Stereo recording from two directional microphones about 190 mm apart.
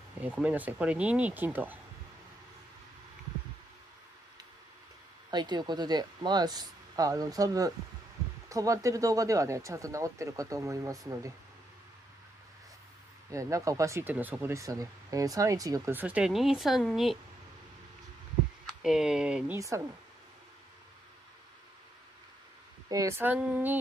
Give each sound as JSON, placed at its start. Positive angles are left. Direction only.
{"t": 0.2, "sound": "speech", "side_deg": -10}
{"t": 5.3, "sound": "speech", "side_deg": -25}
{"t": 13.3, "sound": "speech", "side_deg": -15}
{"t": 18.8, "sound": "speech", "side_deg": -5}
{"t": 22.8, "sound": "speech", "side_deg": -15}